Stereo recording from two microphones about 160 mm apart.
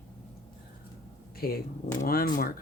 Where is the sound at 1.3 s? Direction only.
70° left (ahead or behind).